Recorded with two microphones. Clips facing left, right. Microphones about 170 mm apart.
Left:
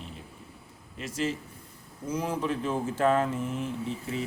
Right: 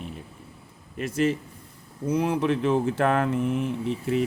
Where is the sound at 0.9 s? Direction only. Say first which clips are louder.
Right 7 dB; 55° right (ahead or behind).